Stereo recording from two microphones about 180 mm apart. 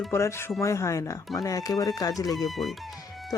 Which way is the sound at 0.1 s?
15° left (ahead or behind).